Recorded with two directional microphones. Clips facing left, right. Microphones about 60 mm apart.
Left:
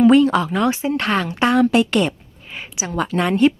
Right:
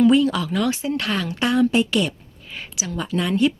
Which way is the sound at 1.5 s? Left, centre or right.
Left.